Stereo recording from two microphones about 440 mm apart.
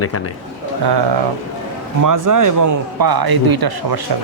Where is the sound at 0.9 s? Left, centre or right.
Right.